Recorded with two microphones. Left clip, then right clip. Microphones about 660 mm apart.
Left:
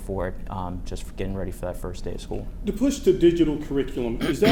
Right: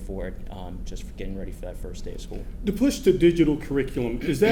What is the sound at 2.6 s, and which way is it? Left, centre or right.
A man's voice, right.